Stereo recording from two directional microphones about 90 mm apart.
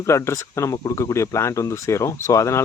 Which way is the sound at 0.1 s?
30° left (ahead or behind).